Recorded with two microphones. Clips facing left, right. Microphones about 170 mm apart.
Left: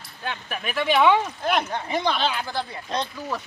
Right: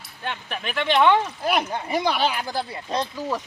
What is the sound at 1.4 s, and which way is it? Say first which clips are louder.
Speech: right 1 dB; 10° right (ahead or behind).